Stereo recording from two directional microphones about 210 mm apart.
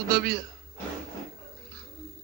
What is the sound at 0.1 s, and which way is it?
Speech, 45° right (ahead or behind).